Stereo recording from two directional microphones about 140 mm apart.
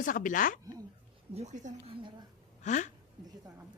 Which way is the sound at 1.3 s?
55° right (ahead or behind).